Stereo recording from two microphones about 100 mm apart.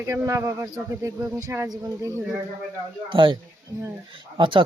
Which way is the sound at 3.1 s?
60° right (ahead or behind).